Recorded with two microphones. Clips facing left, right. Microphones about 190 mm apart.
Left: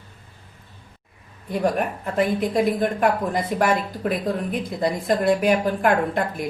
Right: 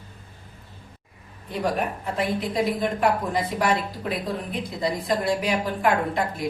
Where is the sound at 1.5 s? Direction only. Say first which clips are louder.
Left 3 dB; 50° left (ahead or behind).